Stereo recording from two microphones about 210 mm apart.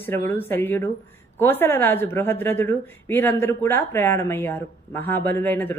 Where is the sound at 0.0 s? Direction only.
10° left (ahead or behind).